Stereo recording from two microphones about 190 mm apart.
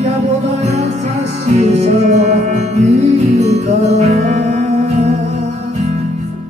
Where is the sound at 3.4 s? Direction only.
35° right (ahead or behind).